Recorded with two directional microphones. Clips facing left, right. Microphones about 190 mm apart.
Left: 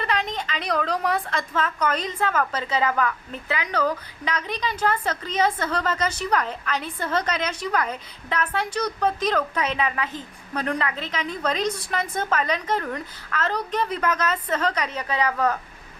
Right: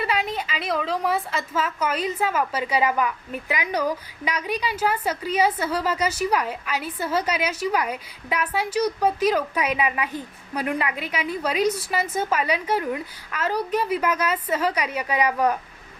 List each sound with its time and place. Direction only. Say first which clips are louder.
0.0 s a woman's voice: right 1 dB; 10° right (ahead or behind)